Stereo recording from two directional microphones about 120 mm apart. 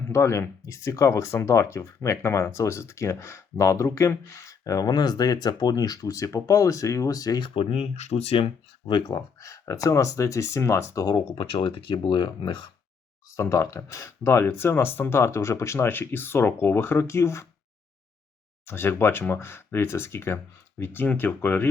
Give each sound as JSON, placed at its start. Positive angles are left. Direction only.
{"t": 0.1, "sound": "speech", "side_deg": 25}
{"t": 7.4, "sound": "speech", "side_deg": 45}
{"t": 8.9, "sound": "speech", "side_deg": 35}
{"t": 11.3, "sound": "speech", "side_deg": 45}
{"t": 13.3, "sound": "speech", "side_deg": 25}
{"t": 18.6, "sound": "speech", "side_deg": 20}